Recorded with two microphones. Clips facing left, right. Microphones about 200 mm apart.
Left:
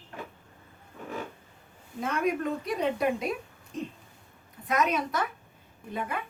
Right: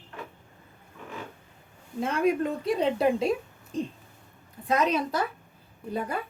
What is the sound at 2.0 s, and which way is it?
A woman's voice, 30° right (ahead or behind).